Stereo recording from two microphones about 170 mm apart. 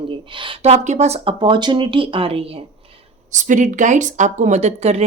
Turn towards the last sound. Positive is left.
turn(degrees=-40)  # may be behind; listen again after turning